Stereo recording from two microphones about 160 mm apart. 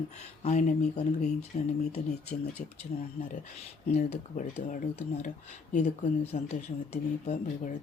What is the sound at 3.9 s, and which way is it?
Speech, 45° left (ahead or behind).